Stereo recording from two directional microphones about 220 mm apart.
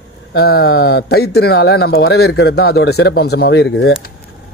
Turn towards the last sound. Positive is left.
turn(degrees=50)  # may be behind; listen again after turning